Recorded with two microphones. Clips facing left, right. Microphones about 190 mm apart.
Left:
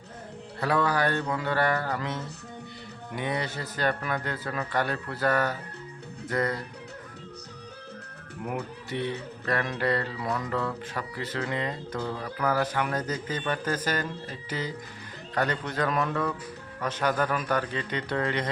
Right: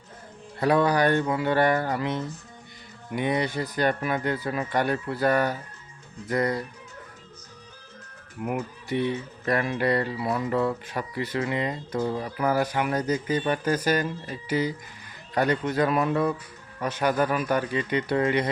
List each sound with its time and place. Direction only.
0.6 s speech: 15° right (ahead or behind)
8.4 s speech: 15° right (ahead or behind)